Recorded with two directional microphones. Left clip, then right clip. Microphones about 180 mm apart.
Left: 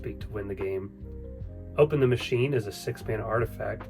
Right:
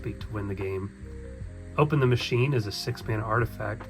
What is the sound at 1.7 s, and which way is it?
Speech, 30° right (ahead or behind).